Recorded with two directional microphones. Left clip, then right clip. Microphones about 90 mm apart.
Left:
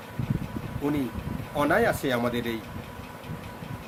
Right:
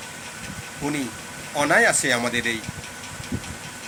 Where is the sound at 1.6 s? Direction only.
5° left (ahead or behind).